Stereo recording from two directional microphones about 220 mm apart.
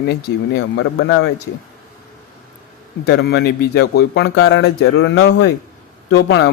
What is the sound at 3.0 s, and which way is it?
Speech, 45° left (ahead or behind).